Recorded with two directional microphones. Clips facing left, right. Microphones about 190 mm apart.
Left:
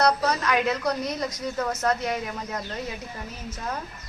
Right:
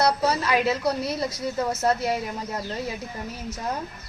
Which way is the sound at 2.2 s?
30° right (ahead or behind).